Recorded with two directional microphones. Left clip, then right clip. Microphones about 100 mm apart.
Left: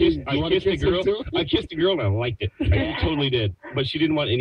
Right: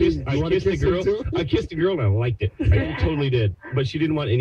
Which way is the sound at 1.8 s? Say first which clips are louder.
Left 1 dB; 30° left (ahead or behind).